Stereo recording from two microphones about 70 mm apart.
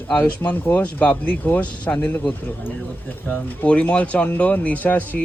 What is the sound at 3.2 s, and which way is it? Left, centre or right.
Speech, left.